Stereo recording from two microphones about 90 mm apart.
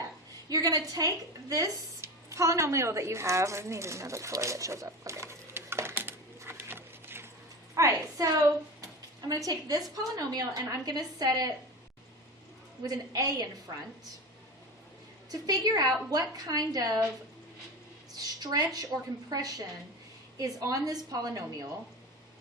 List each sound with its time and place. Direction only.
0.4 s a sound: 45° right (ahead or behind); by 7.3 s 25° right (ahead or behind)
7.8 s a woman's voice: 40° right (ahead or behind)
12.8 s a woman's voice: 40° right (ahead or behind)
15.3 s a woman's voice: 45° right (ahead or behind)
18.1 s a woman's voice: 45° right (ahead or behind)